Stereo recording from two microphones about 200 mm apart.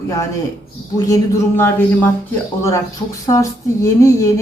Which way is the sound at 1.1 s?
15° left (ahead or behind).